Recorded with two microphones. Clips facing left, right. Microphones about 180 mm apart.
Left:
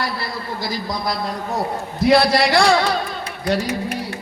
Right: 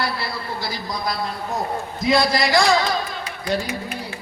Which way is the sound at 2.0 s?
65° left (ahead or behind).